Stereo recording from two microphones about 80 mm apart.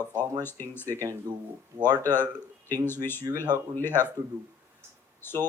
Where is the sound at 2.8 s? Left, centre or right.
Left.